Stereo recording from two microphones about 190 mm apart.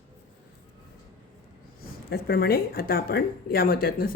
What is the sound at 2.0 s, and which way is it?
Speech, 55° left (ahead or behind).